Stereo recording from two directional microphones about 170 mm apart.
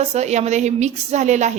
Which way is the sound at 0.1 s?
40° right (ahead or behind).